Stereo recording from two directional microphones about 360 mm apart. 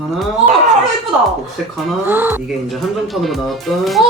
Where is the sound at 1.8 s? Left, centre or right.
Centre.